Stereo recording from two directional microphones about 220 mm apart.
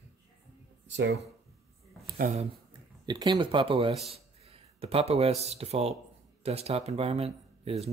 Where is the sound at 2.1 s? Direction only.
40° right (ahead or behind).